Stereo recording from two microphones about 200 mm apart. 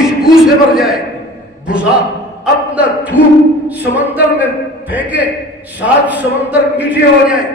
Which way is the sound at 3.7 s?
10° right (ahead or behind).